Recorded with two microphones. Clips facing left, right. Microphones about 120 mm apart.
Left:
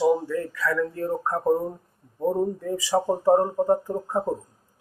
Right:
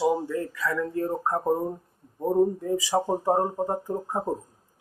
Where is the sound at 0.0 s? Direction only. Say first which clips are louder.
Left 3 dB; 15° right (ahead or behind).